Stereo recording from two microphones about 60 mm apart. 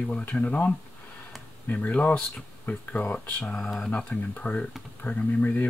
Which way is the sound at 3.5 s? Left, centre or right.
Centre.